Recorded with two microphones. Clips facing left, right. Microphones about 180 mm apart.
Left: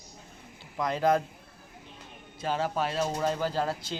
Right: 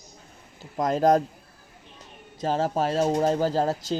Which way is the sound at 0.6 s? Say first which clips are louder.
Right 5 dB; 45° right (ahead or behind).